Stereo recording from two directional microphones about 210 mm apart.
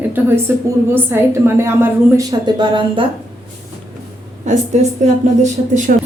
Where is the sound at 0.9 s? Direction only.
10° right (ahead or behind).